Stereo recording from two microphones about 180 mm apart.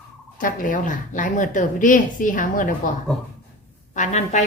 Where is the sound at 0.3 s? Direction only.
45° left (ahead or behind).